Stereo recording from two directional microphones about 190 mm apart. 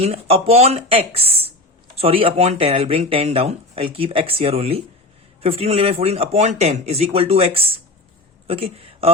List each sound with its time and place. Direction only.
0.0 s a woman's voice: 30° right (ahead or behind)